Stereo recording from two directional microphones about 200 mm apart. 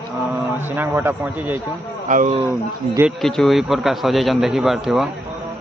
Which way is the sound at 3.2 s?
Centre (ahead or behind).